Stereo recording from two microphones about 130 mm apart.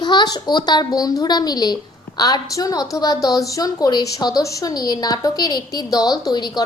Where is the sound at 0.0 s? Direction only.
35° left (ahead or behind).